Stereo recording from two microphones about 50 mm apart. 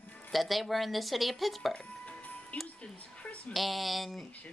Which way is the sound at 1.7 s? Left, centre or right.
Left.